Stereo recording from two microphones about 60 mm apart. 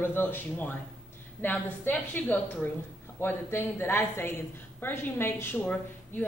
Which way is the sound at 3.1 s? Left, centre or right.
Left.